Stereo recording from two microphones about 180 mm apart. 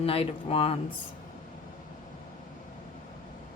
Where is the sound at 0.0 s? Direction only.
30° left (ahead or behind).